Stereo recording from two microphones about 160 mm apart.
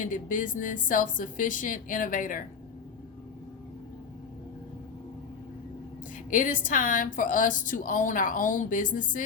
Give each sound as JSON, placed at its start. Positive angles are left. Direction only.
{"t": 0.0, "sound": "a woman's voice", "side_deg": 55}
{"t": 6.3, "sound": "a woman's voice", "side_deg": 55}